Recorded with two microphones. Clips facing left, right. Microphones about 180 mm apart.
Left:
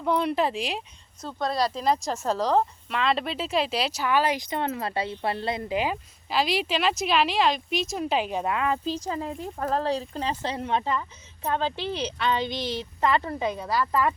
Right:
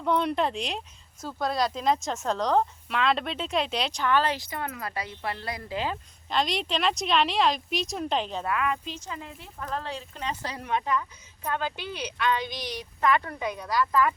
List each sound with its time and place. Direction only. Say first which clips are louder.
0.0 s speech: left 1 dB; 5° left (ahead or behind)
8.5 s a woman's voice: left 3 dB; 30° left (ahead or behind)